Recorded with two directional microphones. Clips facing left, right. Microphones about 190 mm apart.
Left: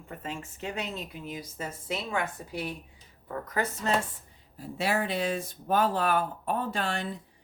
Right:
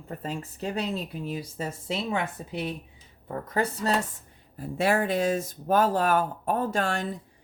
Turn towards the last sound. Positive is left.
turn(degrees=-45)  # may be behind; listen again after turning